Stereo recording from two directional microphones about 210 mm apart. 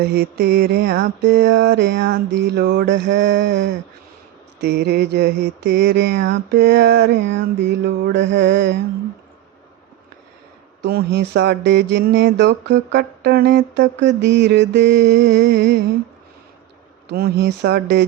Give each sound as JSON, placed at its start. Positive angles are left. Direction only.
{"t": 0.0, "sound": "mantra", "side_deg": -50}
{"t": 10.8, "sound": "mantra", "side_deg": -50}
{"t": 17.1, "sound": "mantra", "side_deg": -50}